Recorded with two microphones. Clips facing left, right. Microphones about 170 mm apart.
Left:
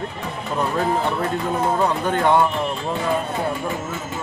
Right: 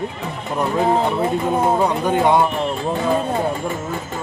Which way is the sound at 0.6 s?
15° right (ahead or behind).